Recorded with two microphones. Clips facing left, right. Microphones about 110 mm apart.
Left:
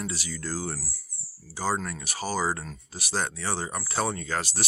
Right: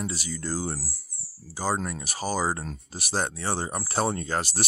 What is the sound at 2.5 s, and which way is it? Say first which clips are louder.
Speech: right 1 dB; 25° right (ahead or behind).